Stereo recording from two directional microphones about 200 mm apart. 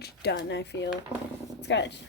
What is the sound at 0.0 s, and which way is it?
A woman's voice, 55° left (ahead or behind).